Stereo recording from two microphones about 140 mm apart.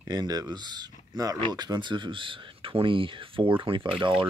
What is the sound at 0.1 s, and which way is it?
Speech, 30° right (ahead or behind).